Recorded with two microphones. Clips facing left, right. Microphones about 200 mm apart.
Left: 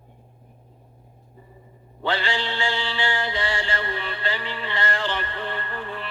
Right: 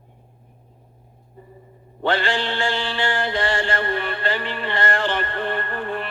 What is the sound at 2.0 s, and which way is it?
Mantra, 50° right (ahead or behind).